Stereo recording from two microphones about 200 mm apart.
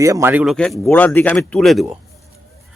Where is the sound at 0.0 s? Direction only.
15° right (ahead or behind).